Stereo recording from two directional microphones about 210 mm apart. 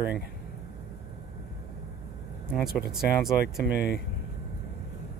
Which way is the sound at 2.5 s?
Centre (ahead or behind).